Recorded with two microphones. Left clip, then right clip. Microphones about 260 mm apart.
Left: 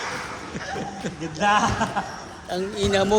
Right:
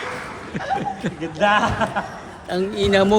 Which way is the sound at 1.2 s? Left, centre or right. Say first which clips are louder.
Right 2 dB; centre.